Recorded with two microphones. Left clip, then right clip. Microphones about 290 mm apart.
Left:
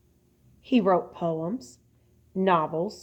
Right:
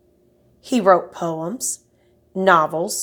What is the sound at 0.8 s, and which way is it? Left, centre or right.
A woman's voice, right.